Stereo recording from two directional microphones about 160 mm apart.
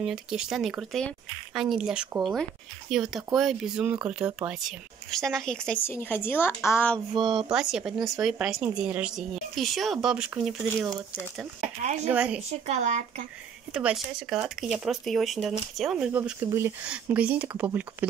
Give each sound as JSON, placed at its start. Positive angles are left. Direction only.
{"t": 0.0, "sound": "a woman's voice", "side_deg": -5}
{"t": 7.2, "sound": "speech", "side_deg": -30}
{"t": 7.5, "sound": "speech", "side_deg": -5}
{"t": 11.8, "sound": "speech", "side_deg": -45}
{"t": 12.1, "sound": "speech", "side_deg": -5}
{"t": 12.4, "sound": "speech", "side_deg": -45}
{"t": 13.7, "sound": "speech", "side_deg": -5}